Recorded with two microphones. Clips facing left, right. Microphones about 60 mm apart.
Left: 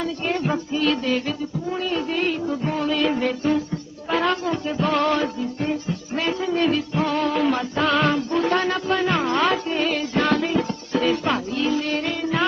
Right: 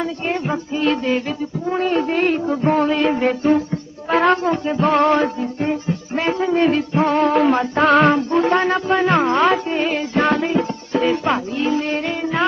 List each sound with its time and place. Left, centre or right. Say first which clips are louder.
0.0 s music: right 2 dB; right
1.7 s music: right 7 dB; right; by 12.5 s centre